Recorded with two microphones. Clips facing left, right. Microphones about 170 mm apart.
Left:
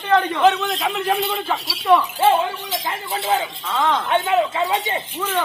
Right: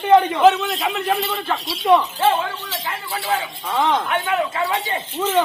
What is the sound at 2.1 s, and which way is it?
Speech, 10° left (ahead or behind).